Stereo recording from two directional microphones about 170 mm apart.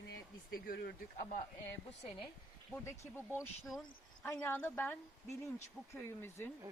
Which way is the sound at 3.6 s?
Centre (ahead or behind).